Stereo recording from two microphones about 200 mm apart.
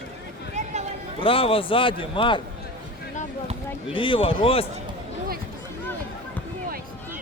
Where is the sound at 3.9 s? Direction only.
25° left (ahead or behind).